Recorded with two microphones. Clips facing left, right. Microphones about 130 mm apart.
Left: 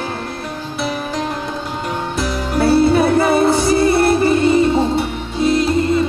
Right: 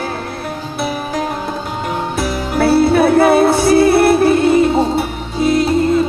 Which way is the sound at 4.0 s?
60° right (ahead or behind).